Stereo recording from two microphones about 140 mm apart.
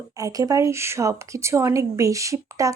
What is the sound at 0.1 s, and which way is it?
Speech, 25° right (ahead or behind).